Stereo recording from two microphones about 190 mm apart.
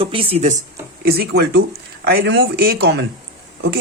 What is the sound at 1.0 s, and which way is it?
Speech, 55° right (ahead or behind).